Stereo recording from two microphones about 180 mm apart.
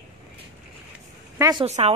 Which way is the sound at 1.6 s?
35° right (ahead or behind).